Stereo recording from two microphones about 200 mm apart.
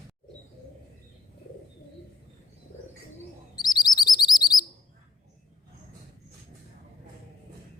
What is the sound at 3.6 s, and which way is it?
Chirp, 20° left (ahead or behind).